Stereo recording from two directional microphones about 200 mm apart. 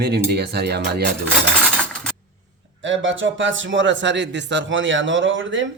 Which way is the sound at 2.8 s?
70° right (ahead or behind).